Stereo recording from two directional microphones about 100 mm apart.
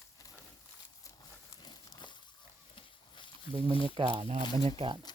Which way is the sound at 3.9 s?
60° right (ahead or behind).